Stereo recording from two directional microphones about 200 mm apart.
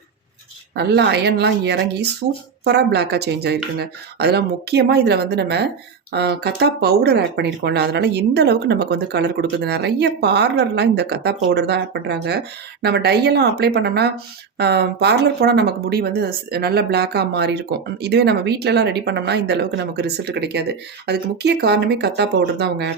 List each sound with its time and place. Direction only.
0.8 s speech: 55° right (ahead or behind)